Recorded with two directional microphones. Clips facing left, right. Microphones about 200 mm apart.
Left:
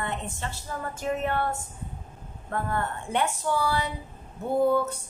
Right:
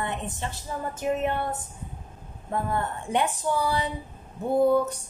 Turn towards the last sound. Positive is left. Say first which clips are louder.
# right 2 dB
turn(degrees=-15)  # may be behind; listen again after turning